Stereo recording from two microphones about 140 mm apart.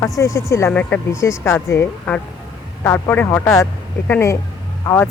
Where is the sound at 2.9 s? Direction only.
15° left (ahead or behind).